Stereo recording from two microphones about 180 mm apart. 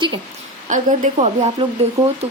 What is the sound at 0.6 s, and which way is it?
Speech, 45° right (ahead or behind).